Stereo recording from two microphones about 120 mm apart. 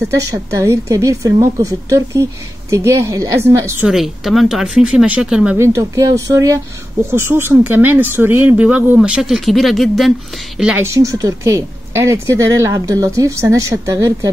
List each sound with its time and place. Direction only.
0.1 s speech: 25° right (ahead or behind)
3.8 s speech: centre (ahead or behind)
5.6 s speech: 25° right (ahead or behind); by 10.1 s centre (ahead or behind)
10.8 s speech: 25° right (ahead or behind)